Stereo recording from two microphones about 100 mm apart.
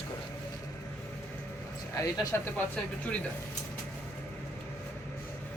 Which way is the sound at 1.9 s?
40° left (ahead or behind).